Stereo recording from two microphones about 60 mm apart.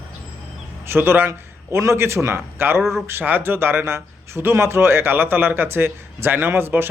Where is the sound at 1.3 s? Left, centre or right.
Right.